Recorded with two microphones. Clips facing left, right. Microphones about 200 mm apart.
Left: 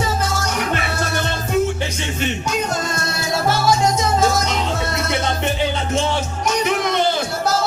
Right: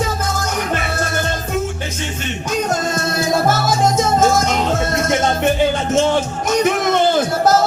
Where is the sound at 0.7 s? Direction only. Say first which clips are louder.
Right 1 dB; 45° right (ahead or behind).